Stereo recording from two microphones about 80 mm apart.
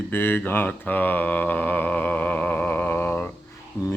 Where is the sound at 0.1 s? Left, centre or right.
Left.